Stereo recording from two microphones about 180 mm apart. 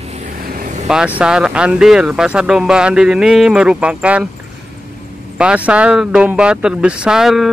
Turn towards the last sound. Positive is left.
turn(degrees=0)  # may be behind; listen again after turning